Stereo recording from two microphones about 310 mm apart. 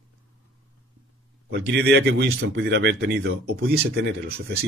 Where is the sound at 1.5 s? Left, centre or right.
Right.